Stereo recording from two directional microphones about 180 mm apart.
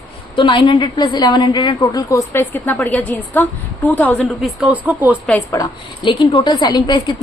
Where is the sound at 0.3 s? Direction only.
25° left (ahead or behind); by 4.3 s 10° left (ahead or behind).